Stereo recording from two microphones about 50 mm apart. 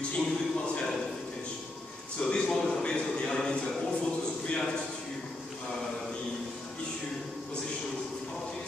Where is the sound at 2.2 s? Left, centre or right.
Centre.